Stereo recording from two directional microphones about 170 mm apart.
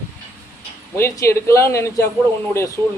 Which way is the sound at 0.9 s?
15° left (ahead or behind).